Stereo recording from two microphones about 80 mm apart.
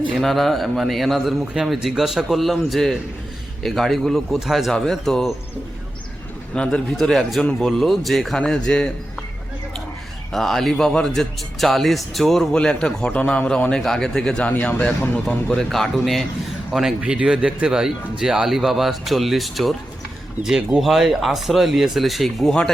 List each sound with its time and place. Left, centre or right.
0.1 s a man's voice: centre
6.5 s a man's voice: centre
10.3 s a man's voice: centre
15.4 s a man's voice: centre
17.0 s a man's voice: centre
20.7 s a man's voice: centre